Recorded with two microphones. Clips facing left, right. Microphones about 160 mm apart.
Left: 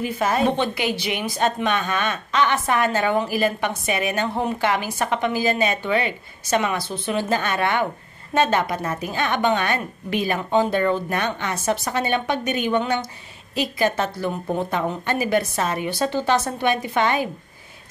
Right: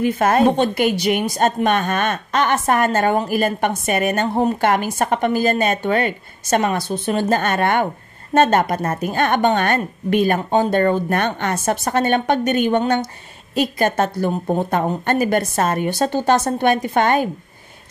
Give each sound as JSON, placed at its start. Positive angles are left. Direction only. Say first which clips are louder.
{"t": 0.0, "sound": "a woman's voice", "louder": "right 6 dB", "side_deg": -55}